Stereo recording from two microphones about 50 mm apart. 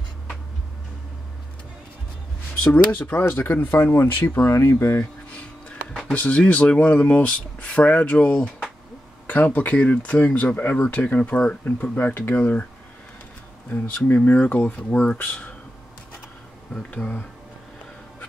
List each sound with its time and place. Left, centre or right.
2.5 s a sound: left
2.9 s speech: left
3.3 s speech: left
4.5 s speech: left
6.1 s speech: left
13.7 s speech: left
16.7 s speech: left